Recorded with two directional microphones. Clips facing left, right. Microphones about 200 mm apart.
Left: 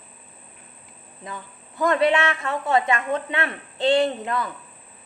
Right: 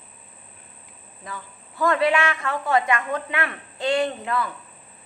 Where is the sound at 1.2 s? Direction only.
20° left (ahead or behind).